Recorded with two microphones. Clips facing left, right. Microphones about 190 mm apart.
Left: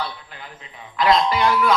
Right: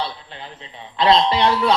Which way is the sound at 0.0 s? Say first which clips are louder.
Right 2 dB; 30° right (ahead or behind).